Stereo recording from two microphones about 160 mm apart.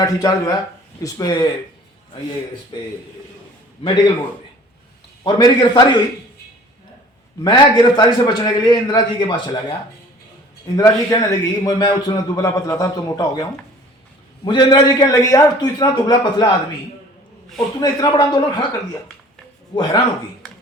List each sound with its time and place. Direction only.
0.0 s a man's voice: 25° left (ahead or behind)
2.7 s a man's voice: 30° left (ahead or behind)
5.2 s a man's voice: 25° left (ahead or behind)
7.4 s a man's voice: 25° left (ahead or behind)
10.8 s a man's voice: 20° left (ahead or behind)
17.7 s a man's voice: 25° left (ahead or behind)
19.7 s a man's voice: 30° left (ahead or behind)